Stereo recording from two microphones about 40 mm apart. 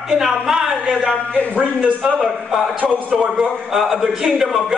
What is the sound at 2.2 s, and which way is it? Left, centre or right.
Speech, right.